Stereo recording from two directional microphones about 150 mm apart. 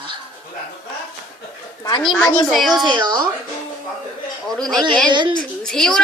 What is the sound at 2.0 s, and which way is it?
Speech, centre (ahead or behind).